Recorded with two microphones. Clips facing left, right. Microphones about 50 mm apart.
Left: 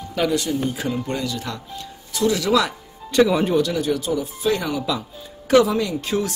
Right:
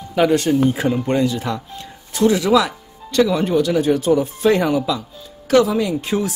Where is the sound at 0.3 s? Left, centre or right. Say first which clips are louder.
Right 7 dB; right.